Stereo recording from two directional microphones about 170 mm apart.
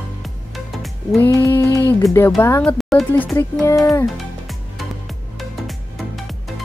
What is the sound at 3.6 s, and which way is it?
Speech, 20° left (ahead or behind).